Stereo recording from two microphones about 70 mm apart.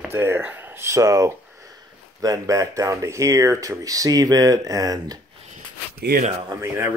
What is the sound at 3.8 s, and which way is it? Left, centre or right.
Speech, right.